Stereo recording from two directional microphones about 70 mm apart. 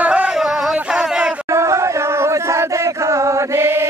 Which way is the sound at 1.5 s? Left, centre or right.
Right.